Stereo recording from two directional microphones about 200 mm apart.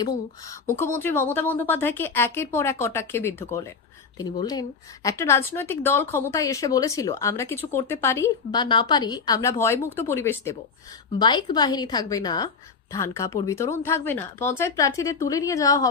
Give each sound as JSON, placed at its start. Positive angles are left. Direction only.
{"t": 0.0, "sound": "a woman's voice", "side_deg": 15}